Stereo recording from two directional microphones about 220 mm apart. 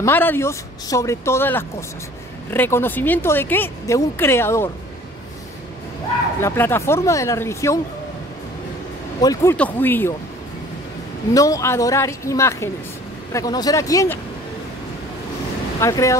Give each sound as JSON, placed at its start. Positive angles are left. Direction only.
{"t": 0.0, "sound": "speech", "side_deg": 10}
{"t": 6.4, "sound": "speech", "side_deg": 10}
{"t": 9.2, "sound": "speech", "side_deg": 15}
{"t": 11.3, "sound": "speech", "side_deg": 15}
{"t": 15.8, "sound": "speech", "side_deg": 15}